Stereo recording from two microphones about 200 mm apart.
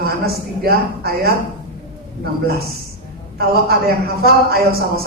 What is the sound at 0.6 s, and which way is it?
Speech, 50° right (ahead or behind).